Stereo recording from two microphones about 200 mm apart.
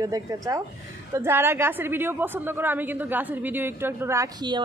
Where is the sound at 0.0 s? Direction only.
15° right (ahead or behind).